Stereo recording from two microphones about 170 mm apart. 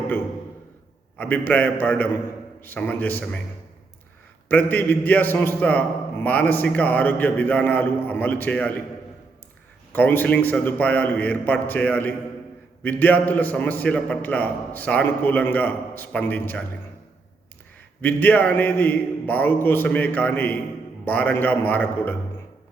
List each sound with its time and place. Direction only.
1.2 s a man's voice: 10° left (ahead or behind)
4.4 s a man's voice: 10° left (ahead or behind)
9.9 s a man's voice: 10° left (ahead or behind)
18.0 s a man's voice: 10° left (ahead or behind)